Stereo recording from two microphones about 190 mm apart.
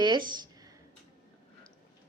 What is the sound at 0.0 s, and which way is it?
Speech, 25° right (ahead or behind).